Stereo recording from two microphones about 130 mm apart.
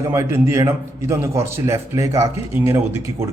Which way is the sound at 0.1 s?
20° right (ahead or behind).